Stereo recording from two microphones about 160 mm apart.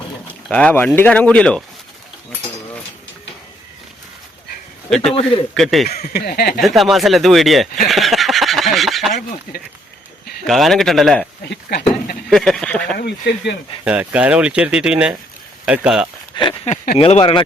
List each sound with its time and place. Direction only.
0.5 s speech: 10° left (ahead or behind)
4.9 s speech: centre (ahead or behind)
6.1 s speech: 80° left
6.6 s speech: centre (ahead or behind)
10.4 s speech: centre (ahead or behind)
11.4 s speech: 75° left (ahead or behind)
12.3 s speech: centre (ahead or behind)
13.0 s speech: 90° left
13.8 s speech: 10° right (ahead or behind)
16.3 s a sound: 30° left (ahead or behind)
17.0 s speech: 35° left (ahead or behind)